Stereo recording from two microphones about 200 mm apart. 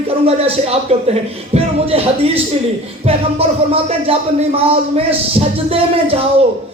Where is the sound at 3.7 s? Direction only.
30° right (ahead or behind).